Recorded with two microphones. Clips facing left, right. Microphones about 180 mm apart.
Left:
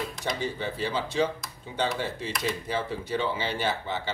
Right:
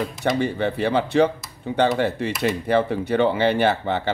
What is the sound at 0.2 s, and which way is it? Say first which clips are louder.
Speech: right 11 dB; 65° right (ahead or behind).